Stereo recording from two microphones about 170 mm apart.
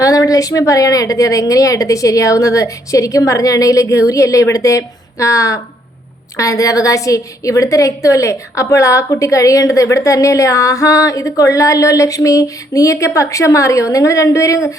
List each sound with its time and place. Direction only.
0.0 s a woman's voice: 20° left (ahead or behind)